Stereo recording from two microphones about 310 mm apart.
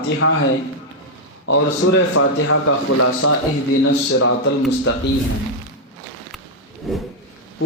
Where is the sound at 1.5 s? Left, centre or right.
Left.